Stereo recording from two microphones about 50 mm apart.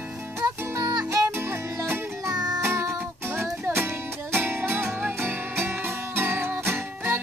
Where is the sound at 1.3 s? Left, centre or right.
Right.